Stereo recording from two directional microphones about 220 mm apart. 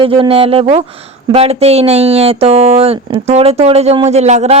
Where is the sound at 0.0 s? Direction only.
25° right (ahead or behind).